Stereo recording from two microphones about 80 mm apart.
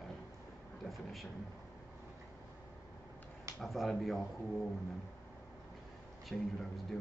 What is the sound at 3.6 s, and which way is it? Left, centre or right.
Speech, centre.